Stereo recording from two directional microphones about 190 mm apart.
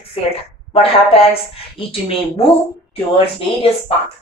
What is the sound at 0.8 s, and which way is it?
A woman's voice, 30° left (ahead or behind).